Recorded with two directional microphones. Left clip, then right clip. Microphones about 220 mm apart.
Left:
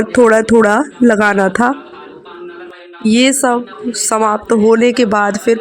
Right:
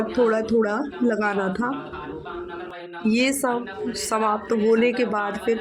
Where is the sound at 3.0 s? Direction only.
35° left (ahead or behind).